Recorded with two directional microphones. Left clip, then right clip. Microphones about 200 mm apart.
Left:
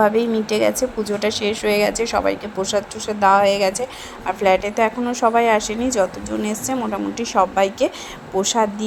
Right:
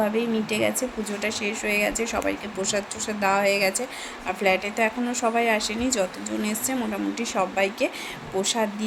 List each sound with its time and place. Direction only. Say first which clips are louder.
0.0 s speech: left 8 dB; 25° left (ahead or behind)